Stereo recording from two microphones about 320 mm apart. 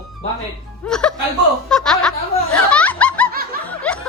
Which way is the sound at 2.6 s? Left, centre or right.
Centre.